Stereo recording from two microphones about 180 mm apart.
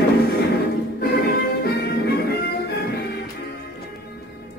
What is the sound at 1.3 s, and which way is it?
Music, 65° left (ahead or behind).